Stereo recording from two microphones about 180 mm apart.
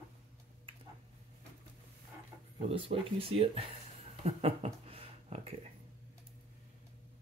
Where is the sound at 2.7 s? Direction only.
30° right (ahead or behind).